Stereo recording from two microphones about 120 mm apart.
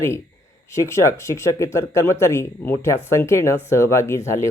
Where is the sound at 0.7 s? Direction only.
25° left (ahead or behind).